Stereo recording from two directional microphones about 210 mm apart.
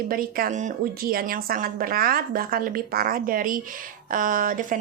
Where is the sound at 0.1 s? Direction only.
45° right (ahead or behind).